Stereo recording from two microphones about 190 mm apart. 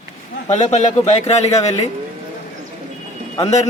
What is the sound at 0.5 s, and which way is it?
A man's voice, 35° left (ahead or behind).